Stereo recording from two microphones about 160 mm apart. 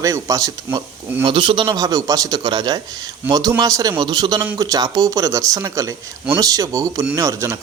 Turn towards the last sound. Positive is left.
turn(degrees=-20)  # may be behind; listen again after turning